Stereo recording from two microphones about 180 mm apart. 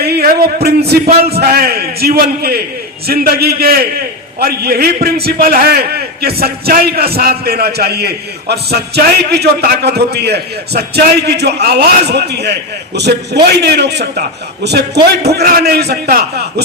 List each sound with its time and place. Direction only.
0.0 s a man's voice: 60° right (ahead or behind)